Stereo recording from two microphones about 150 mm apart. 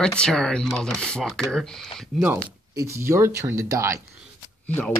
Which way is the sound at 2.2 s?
15° right (ahead or behind).